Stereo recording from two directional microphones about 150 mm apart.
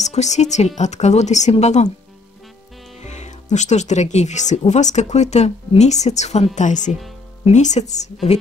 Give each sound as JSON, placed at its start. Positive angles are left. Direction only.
{"t": 0.0, "sound": "speech", "side_deg": 50}
{"t": 3.0, "sound": "speech", "side_deg": 50}